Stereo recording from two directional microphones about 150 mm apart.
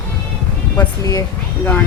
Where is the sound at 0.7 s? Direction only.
20° left (ahead or behind).